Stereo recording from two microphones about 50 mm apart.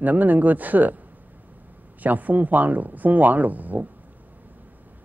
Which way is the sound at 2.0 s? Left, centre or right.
Right.